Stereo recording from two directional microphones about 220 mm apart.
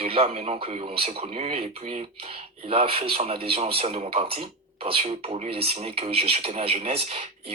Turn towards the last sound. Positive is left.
turn(degrees=-25)  # may be behind; listen again after turning